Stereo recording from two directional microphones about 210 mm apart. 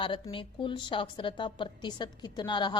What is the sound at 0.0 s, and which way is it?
A woman's voice, 25° left (ahead or behind).